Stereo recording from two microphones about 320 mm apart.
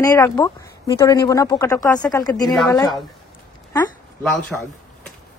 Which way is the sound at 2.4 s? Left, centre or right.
Centre.